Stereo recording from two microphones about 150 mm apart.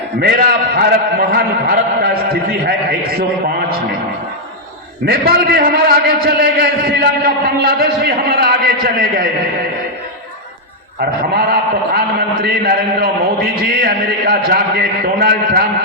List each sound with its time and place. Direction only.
0.2 s a man's voice: 90° right
5.0 s a man's voice: 90° right
11.9 s a man's voice: 90° right